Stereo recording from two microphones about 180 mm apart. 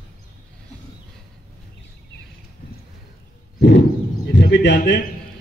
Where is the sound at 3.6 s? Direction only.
70° left (ahead or behind).